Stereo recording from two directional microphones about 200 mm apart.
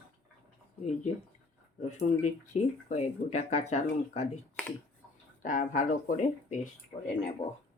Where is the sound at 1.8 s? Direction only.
35° left (ahead or behind).